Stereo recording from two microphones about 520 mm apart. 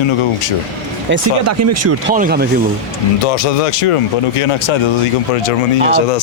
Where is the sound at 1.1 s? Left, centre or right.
Right.